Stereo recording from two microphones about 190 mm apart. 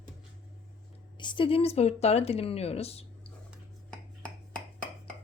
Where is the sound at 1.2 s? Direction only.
25° left (ahead or behind).